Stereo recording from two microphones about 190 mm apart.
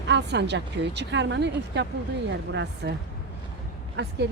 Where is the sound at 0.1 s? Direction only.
65° right (ahead or behind).